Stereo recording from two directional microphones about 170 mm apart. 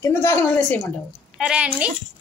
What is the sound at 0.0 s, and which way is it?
Speech, 15° left (ahead or behind).